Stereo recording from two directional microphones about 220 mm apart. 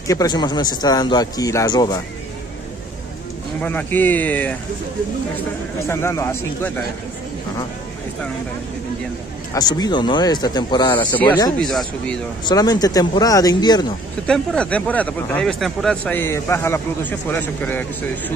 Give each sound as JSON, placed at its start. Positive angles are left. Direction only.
{"t": 0.1, "sound": "speech", "side_deg": 15}
{"t": 3.6, "sound": "speech", "side_deg": 10}
{"t": 5.9, "sound": "speech", "side_deg": 10}
{"t": 9.5, "sound": "speech", "side_deg": 15}
{"t": 11.5, "sound": "speech", "side_deg": 0}
{"t": 12.4, "sound": "speech", "side_deg": 15}
{"t": 14.2, "sound": "speech", "side_deg": 5}